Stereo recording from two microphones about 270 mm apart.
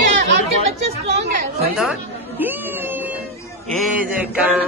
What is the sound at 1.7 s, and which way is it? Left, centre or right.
A man's voice, centre.